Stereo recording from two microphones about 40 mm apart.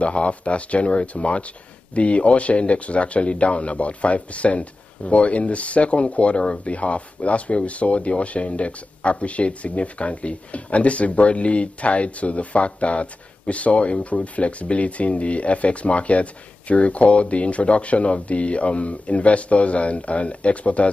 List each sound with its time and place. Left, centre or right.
0.0 s speech: left